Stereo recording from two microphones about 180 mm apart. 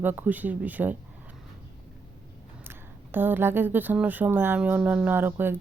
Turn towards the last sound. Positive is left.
turn(degrees=-10)  # may be behind; listen again after turning